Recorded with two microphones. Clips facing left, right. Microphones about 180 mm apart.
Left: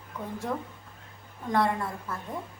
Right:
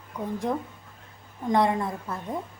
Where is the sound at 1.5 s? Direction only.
15° right (ahead or behind).